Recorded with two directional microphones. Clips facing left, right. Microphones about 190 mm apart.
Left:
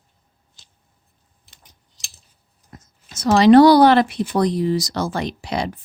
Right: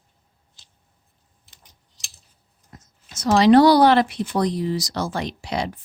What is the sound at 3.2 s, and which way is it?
Speech, 60° left (ahead or behind).